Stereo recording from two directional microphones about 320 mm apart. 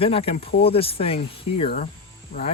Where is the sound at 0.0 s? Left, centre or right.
Centre.